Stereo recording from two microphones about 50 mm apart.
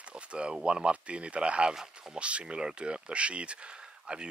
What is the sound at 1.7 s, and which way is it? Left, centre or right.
Speech, centre.